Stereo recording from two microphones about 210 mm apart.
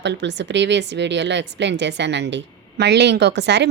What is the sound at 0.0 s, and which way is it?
A woman's voice, 55° right (ahead or behind).